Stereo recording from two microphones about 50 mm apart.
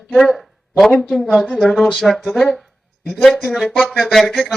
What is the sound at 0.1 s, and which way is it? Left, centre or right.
Speech, centre.